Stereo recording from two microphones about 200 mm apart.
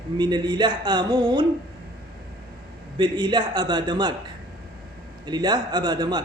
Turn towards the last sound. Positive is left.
turn(degrees=-20)  # may be behind; listen again after turning